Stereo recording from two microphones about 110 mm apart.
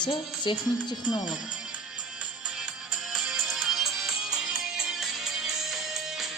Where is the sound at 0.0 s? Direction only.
45° left (ahead or behind).